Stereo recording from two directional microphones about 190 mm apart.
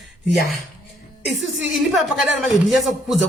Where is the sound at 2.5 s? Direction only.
Centre (ahead or behind).